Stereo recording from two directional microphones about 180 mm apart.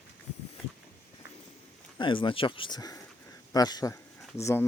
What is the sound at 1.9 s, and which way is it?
Speech, 30° left (ahead or behind).